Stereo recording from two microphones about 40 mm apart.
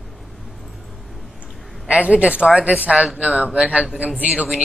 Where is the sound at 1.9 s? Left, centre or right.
Right.